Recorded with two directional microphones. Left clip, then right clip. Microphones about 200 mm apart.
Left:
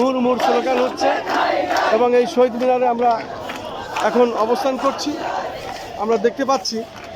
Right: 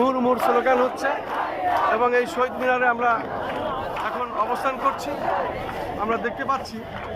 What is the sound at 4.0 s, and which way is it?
Speech, 45° left (ahead or behind).